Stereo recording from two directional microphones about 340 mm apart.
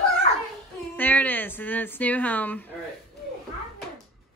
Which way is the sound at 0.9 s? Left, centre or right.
Centre.